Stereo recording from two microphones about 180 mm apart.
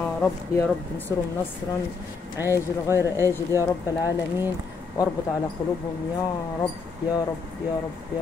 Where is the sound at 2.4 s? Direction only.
15° right (ahead or behind).